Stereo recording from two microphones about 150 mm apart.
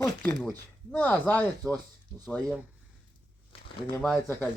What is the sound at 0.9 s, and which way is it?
Speech, 10° left (ahead or behind).